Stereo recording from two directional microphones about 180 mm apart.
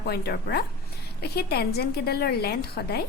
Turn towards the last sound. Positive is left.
turn(degrees=60)  # may be behind; listen again after turning